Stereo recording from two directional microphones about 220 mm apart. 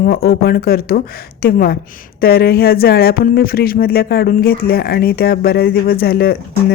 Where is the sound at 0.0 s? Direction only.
45° left (ahead or behind).